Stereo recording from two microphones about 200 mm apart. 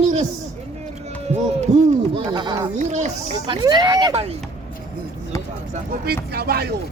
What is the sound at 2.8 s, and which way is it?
Speech, 35° right (ahead or behind).